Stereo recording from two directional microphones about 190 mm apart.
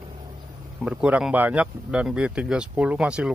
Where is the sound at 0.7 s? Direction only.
5° right (ahead or behind).